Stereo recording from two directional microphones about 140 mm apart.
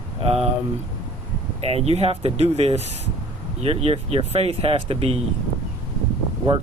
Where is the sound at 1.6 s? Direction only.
45° right (ahead or behind).